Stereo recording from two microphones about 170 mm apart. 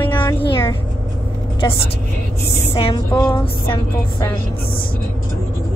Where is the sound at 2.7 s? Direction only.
35° left (ahead or behind).